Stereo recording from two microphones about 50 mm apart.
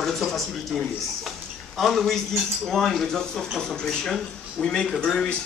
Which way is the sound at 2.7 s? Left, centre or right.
Centre.